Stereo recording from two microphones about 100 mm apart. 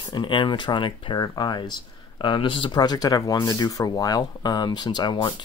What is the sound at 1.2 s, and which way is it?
Speech, 45° left (ahead or behind).